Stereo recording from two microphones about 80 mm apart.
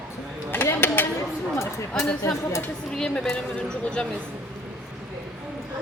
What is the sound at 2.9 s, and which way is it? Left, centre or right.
A woman's voice, centre.